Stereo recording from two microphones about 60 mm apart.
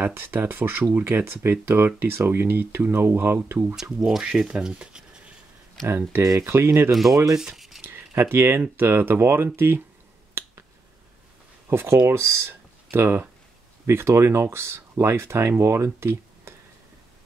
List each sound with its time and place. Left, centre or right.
0.0 s speech: right
4.0 s speech: centre
6.2 s speech: right
6.9 s speech: centre
7.3 s rub: centre
7.8 s speech: right
10.4 s finger snapping: right
11.7 s speech: right